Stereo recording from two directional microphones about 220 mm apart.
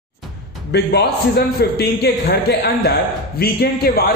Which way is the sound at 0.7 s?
50° left (ahead or behind).